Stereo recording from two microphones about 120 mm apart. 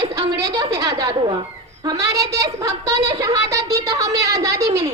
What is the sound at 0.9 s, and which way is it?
Speech, 40° right (ahead or behind).